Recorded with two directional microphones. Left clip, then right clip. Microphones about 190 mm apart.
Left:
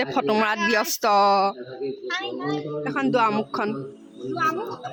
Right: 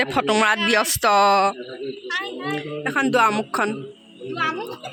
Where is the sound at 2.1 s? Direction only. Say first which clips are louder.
Right 3 dB; 45° left (ahead or behind).